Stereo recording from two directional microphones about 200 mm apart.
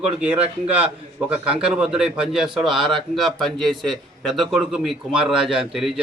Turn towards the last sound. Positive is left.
turn(degrees=0)  # may be behind; listen again after turning